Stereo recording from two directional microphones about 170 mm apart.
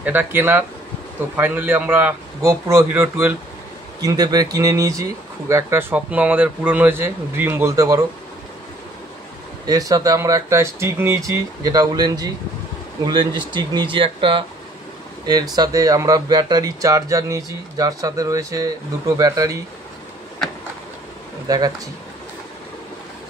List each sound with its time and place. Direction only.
0.0 s speech: 10° right (ahead or behind)
9.7 s speech: 20° right (ahead or behind)
15.5 s speech: 20° right (ahead or behind)
21.5 s speech: 25° right (ahead or behind)